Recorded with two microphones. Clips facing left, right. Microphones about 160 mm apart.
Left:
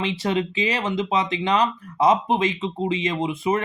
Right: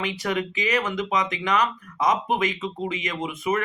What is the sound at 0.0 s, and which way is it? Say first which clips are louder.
Speech: left 3 dB; 25° left (ahead or behind).